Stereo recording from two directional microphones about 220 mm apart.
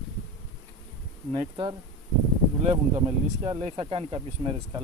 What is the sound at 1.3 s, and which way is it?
Speech, 20° right (ahead or behind).